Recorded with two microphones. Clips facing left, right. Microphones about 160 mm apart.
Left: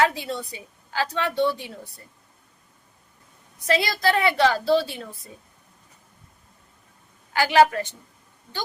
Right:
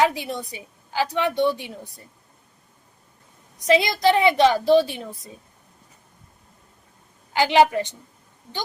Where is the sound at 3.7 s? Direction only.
15° right (ahead or behind).